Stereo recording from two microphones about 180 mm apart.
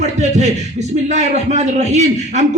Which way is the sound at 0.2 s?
40° right (ahead or behind).